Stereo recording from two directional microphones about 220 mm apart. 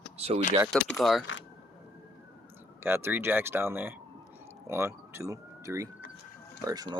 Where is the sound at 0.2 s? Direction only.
25° right (ahead or behind).